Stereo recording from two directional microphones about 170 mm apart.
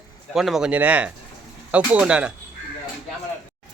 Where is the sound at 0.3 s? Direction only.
Centre (ahead or behind).